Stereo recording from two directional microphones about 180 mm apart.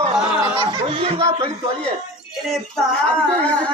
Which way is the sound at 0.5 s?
30° right (ahead or behind).